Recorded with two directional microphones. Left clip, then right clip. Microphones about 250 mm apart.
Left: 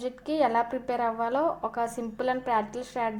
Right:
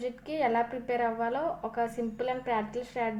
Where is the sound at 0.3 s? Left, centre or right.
Left.